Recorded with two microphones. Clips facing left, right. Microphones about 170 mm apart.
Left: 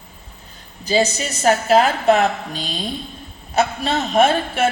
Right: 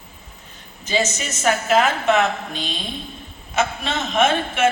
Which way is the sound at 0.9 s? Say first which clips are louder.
Left 4 dB; 35° left (ahead or behind).